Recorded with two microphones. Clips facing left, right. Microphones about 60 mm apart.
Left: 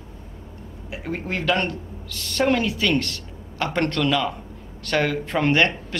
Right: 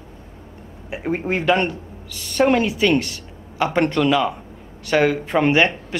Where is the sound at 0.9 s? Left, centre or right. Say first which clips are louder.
Right 6 dB; right.